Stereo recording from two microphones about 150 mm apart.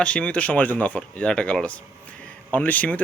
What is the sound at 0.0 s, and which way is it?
Speech, 5° left (ahead or behind).